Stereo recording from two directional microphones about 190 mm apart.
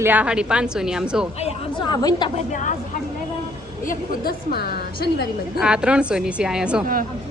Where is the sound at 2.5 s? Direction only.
40° left (ahead or behind).